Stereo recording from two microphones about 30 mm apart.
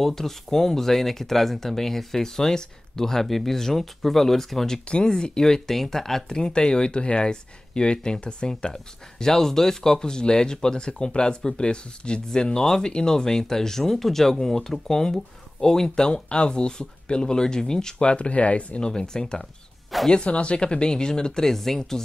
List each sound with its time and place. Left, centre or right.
0.0 s speech: centre
4.8 s speech: left; by 6.3 s centre
6.3 s speech: left
8.7 s speech: centre
18.0 s speech: left
18.8 s speech: left
20.1 s speech: left
21.5 s speech: centre